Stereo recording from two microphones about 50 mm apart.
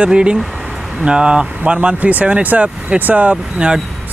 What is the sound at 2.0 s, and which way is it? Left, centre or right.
Speech, right.